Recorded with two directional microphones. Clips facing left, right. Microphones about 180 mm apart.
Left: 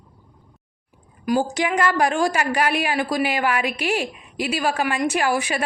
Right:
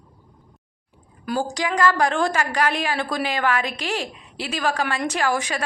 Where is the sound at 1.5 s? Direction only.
20° left (ahead or behind).